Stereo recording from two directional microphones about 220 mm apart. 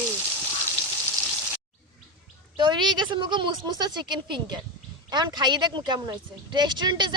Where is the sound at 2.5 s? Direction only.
20° right (ahead or behind).